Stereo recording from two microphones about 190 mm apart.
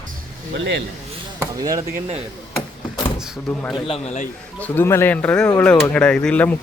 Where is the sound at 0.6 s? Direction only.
70° right (ahead or behind).